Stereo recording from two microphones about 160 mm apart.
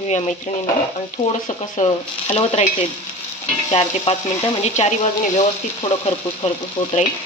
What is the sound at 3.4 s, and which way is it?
Stir, 30° left (ahead or behind).